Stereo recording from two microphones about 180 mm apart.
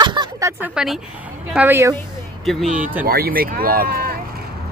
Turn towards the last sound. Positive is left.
turn(degrees=-55)  # may be behind; listen again after turning